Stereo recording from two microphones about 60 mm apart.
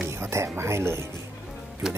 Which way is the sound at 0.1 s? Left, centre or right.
Right.